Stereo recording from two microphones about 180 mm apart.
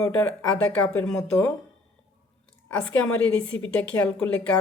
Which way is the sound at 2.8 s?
10° left (ahead or behind).